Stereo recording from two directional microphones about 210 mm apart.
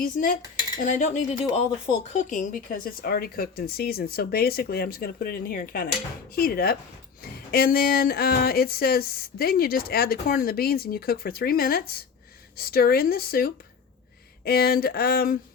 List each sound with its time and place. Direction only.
0.9 s speech: 35° left (ahead or behind)